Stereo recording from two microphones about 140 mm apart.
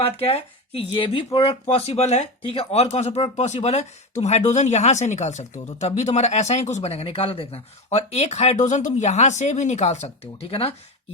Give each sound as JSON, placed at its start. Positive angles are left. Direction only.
{"t": 0.0, "sound": "speech", "side_deg": 45}